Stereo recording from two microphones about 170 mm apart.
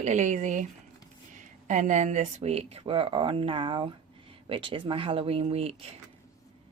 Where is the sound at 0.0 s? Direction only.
45° right (ahead or behind).